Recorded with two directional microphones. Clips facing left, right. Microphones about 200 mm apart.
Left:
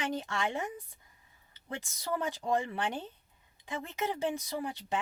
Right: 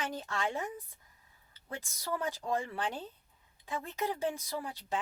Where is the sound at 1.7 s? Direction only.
20° left (ahead or behind).